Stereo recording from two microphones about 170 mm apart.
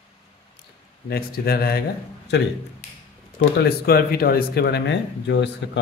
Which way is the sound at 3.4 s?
70° left (ahead or behind).